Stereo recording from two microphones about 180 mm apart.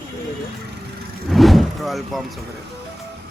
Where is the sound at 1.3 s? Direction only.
Centre (ahead or behind).